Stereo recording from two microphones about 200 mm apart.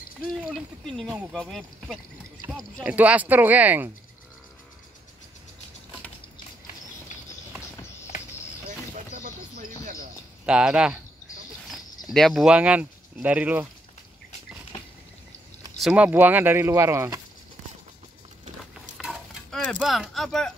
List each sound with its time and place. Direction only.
0.3 s speech: centre (ahead or behind)
8.6 s music: 45° right (ahead or behind)
10.4 s speech: 5° right (ahead or behind)
12.1 s speech: centre (ahead or behind)
15.8 s speech: 5° right (ahead or behind)
18.9 s a sound: 5° right (ahead or behind)